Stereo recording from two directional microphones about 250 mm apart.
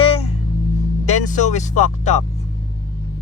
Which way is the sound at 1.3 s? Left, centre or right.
Left.